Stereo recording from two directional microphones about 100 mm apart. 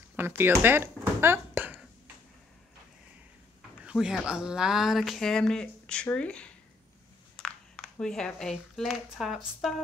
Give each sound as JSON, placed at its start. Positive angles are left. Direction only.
{"t": 0.1, "sound": "speech", "side_deg": -20}
{"t": 3.8, "sound": "speech", "side_deg": -5}